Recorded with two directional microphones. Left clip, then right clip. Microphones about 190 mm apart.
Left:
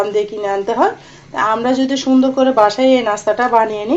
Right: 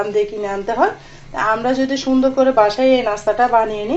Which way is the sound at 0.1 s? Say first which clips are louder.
Left 2 dB; 20° left (ahead or behind).